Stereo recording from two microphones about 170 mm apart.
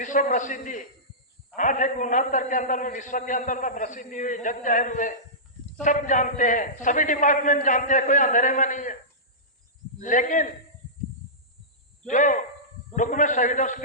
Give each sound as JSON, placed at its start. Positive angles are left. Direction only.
{"t": 0.0, "sound": "a man's voice", "side_deg": 50}
{"t": 10.0, "sound": "a man's voice", "side_deg": 50}
{"t": 12.0, "sound": "a man's voice", "side_deg": 50}